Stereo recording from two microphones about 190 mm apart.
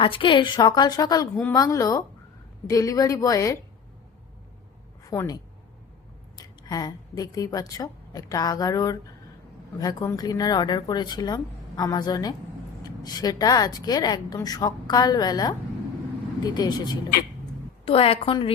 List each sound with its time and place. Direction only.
0.0 s a woman's voice: 25° left (ahead or behind)
5.0 s a woman's voice: 15° left (ahead or behind)